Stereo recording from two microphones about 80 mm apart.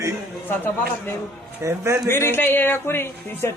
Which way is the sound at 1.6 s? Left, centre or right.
Right.